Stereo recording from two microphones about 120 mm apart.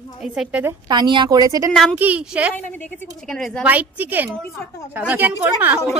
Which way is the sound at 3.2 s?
5° left (ahead or behind).